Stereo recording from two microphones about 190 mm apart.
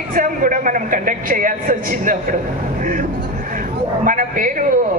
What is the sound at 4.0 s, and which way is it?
Speech, 45° right (ahead or behind).